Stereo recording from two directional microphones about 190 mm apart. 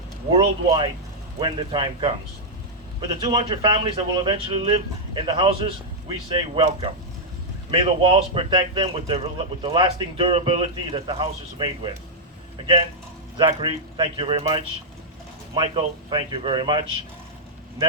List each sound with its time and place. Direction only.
0.3 s a man's voice: 25° right (ahead or behind)
13.3 s a man's voice: 25° right (ahead or behind)